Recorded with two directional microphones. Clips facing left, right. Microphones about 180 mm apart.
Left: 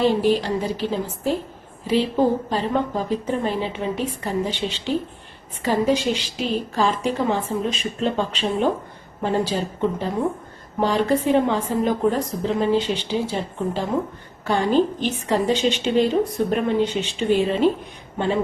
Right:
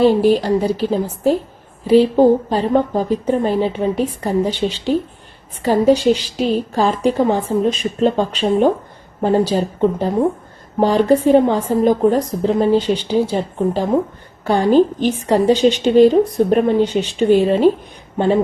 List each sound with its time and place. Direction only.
0.0 s a woman's voice: 40° right (ahead or behind)